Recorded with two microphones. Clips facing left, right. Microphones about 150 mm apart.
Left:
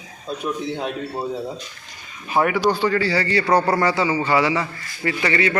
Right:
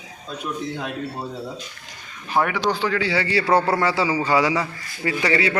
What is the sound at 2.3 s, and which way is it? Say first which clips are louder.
A man's voice: left 3 dB; 5° left (ahead or behind).